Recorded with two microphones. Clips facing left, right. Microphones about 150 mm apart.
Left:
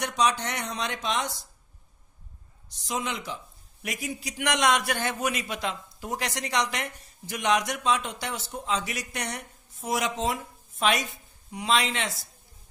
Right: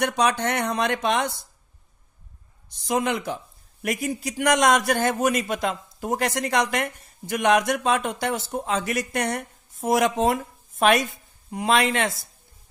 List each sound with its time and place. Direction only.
0.0 s speech: 55° right (ahead or behind)
2.9 s a man's voice: 55° right (ahead or behind)